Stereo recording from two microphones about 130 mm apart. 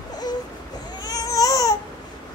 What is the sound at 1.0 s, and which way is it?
Baby cry, 30° left (ahead or behind).